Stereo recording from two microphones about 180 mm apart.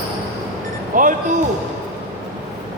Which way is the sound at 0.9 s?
50° right (ahead or behind).